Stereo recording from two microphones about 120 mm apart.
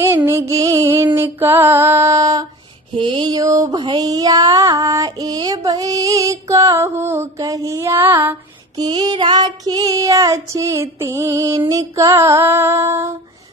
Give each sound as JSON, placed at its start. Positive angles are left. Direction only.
{"t": 0.0, "sound": "music", "side_deg": -20}
{"t": 3.0, "sound": "mantra", "side_deg": -40}
{"t": 3.8, "sound": "child singing", "side_deg": -35}
{"t": 8.7, "sound": "child singing", "side_deg": -35}